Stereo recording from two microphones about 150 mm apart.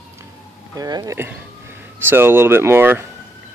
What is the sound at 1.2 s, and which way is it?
Speech, 15° right (ahead or behind).